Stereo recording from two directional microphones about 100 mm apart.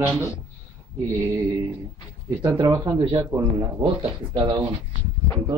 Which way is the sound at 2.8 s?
40° right (ahead or behind).